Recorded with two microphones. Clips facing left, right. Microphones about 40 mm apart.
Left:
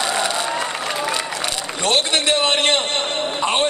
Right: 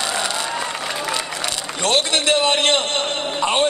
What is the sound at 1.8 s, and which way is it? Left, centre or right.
A man's voice, left.